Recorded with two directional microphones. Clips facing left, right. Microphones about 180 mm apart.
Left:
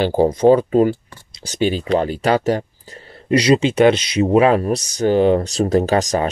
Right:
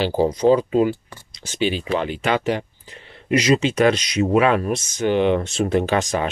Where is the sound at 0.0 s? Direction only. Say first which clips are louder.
Left 4 dB; 50° left (ahead or behind).